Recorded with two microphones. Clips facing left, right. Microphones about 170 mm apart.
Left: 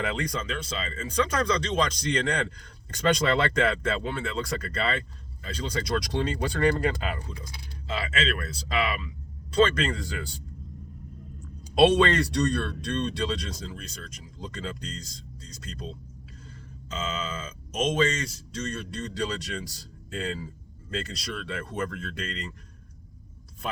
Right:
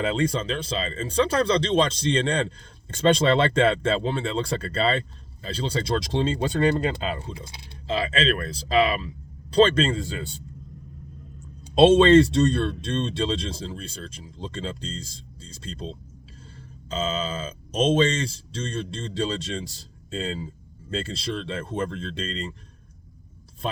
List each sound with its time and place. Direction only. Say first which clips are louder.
0.0 s speech: right 6 dB; 25° right (ahead or behind)
11.7 s speech: right 6 dB; 25° right (ahead or behind)